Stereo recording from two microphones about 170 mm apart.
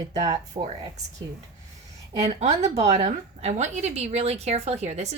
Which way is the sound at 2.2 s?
40° right (ahead or behind).